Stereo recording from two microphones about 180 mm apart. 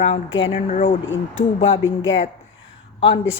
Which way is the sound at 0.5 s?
40° left (ahead or behind).